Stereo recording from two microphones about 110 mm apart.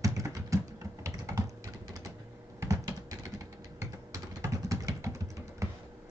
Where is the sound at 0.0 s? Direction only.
30° right (ahead or behind).